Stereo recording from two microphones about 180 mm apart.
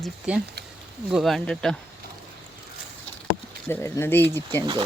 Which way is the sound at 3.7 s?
15° left (ahead or behind).